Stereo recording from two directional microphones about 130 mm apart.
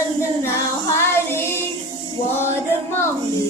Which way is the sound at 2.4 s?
20° left (ahead or behind).